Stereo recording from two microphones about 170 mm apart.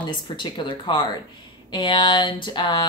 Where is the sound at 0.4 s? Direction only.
25° left (ahead or behind).